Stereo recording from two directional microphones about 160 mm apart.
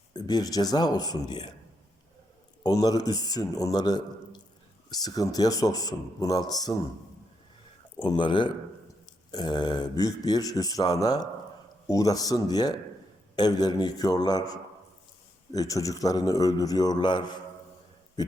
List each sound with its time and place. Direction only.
0.1 s speech: 25° left (ahead or behind)
2.6 s speech: 25° left (ahead or behind)
8.0 s speech: 30° left (ahead or behind)